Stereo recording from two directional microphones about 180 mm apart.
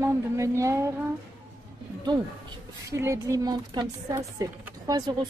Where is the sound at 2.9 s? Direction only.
15° right (ahead or behind).